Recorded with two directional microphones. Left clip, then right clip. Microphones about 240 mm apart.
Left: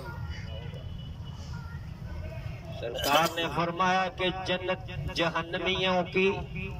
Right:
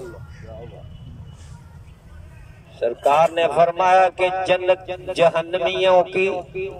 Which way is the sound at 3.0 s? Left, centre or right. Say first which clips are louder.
Right 10 dB; right.